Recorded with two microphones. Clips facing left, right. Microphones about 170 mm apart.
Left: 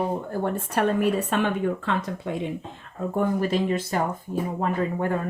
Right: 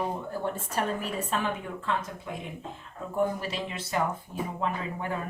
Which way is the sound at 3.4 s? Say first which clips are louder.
Left 11 dB; 50° left (ahead or behind).